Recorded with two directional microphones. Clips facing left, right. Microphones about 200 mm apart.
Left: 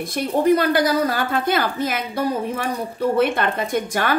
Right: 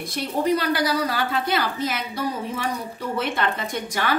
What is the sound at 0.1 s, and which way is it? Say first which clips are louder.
A woman's voice: left 5 dB; 50° left (ahead or behind).